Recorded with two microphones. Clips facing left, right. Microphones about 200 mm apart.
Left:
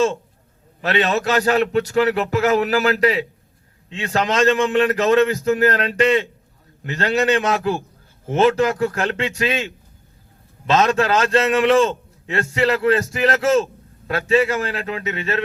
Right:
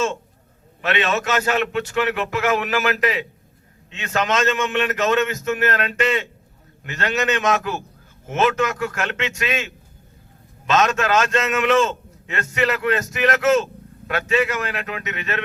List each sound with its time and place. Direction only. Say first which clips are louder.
0.8 s a man's voice: left 2 dB; 35° left (ahead or behind)